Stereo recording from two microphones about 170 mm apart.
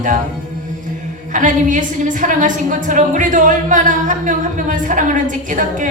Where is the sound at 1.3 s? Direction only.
50° right (ahead or behind).